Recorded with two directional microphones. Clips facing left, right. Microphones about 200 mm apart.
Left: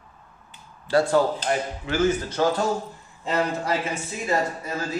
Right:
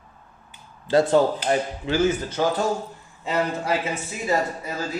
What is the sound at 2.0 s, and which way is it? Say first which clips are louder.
A man's voice: even; 10° right (ahead or behind).